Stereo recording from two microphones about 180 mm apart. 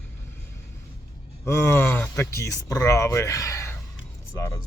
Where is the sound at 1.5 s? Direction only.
15° left (ahead or behind).